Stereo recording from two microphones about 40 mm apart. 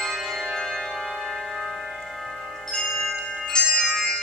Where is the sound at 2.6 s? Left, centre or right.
Centre.